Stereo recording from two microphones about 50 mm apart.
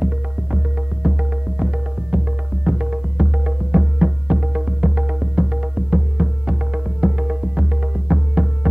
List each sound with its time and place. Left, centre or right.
0.0 s music: right